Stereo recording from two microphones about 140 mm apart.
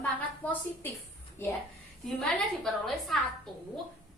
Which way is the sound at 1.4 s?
15° left (ahead or behind).